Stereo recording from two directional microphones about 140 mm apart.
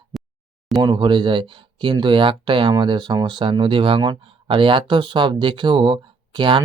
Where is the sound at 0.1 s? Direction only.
Centre (ahead or behind).